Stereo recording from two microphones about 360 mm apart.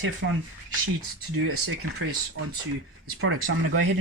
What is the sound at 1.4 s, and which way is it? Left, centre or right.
Speech, right.